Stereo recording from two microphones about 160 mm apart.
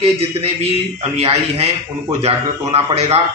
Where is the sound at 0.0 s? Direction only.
40° right (ahead or behind).